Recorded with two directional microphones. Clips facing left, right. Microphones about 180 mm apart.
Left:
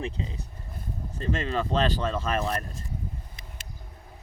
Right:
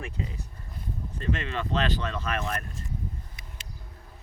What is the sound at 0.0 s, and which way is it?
Speech, 25° left (ahead or behind).